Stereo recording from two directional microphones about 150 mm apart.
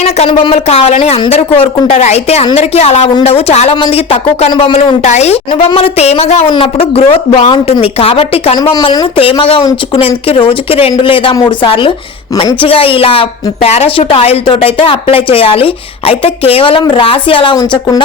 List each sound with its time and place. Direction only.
0.0 s a woman's voice: 45° left (ahead or behind)
4.5 s a woman's voice: 35° left (ahead or behind)
5.0 s a woman's voice: 45° left (ahead or behind)
8.7 s a woman's voice: 30° left (ahead or behind)
10.2 s a woman's voice: 35° left (ahead or behind)